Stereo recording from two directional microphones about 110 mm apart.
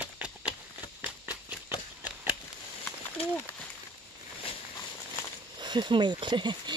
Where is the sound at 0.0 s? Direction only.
10° right (ahead or behind).